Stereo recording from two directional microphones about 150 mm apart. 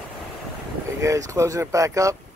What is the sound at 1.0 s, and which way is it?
Speech, 20° right (ahead or behind).